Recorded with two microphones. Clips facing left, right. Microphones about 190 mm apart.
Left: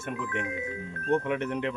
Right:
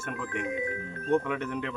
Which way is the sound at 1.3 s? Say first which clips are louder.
Left 3 dB; 20° left (ahead or behind).